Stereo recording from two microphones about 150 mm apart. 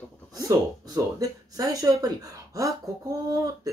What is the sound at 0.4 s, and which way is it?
Speech, 25° right (ahead or behind).